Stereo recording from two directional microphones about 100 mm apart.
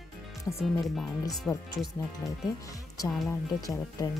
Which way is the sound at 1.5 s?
10° left (ahead or behind).